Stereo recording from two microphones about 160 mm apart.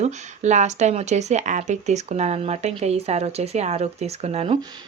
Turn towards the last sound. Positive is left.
turn(degrees=-40)  # may be behind; listen again after turning